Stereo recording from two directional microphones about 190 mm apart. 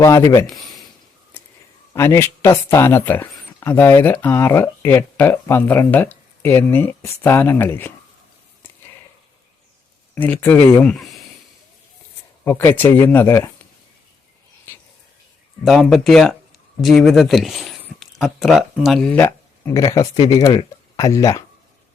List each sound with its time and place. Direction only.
0.0 s speech: 15° left (ahead or behind)
0.4 s a sound: centre (ahead or behind)
1.9 s speech: 10° left (ahead or behind)
10.2 s speech: 10° left (ahead or behind)
12.5 s speech: 10° left (ahead or behind)
15.6 s speech: centre (ahead or behind); by 21.4 s 15° left (ahead or behind)